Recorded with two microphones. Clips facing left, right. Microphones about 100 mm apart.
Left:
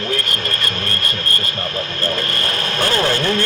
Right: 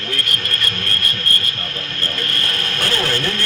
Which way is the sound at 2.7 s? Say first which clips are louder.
Left 4 dB; 25° left (ahead or behind).